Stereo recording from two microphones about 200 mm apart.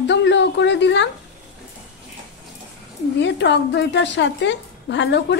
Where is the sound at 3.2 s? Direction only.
60° left (ahead or behind).